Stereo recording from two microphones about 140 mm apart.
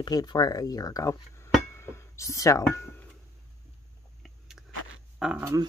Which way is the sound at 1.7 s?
20° left (ahead or behind).